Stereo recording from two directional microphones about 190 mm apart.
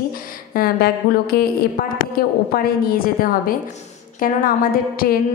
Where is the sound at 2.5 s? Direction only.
50° left (ahead or behind).